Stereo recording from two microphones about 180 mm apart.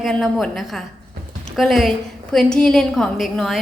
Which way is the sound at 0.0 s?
Centre (ahead or behind).